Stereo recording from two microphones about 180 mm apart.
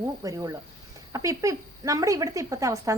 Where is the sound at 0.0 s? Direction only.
20° right (ahead or behind).